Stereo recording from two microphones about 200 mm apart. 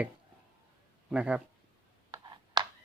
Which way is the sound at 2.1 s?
20° right (ahead or behind).